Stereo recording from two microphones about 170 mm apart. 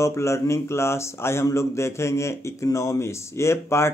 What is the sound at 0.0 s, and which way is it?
Speech, 15° left (ahead or behind).